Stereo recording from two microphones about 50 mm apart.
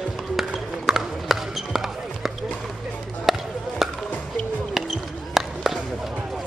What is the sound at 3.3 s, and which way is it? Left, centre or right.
Chop, centre.